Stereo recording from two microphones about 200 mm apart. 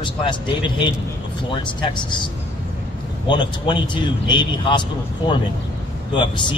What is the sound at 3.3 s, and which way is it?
A man's voice, 25° left (ahead or behind).